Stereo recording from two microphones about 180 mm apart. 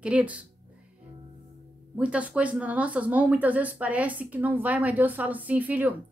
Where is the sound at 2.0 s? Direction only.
5° right (ahead or behind).